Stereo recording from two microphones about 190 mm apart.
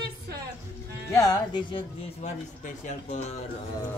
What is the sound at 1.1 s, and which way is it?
Music, 20° left (ahead or behind).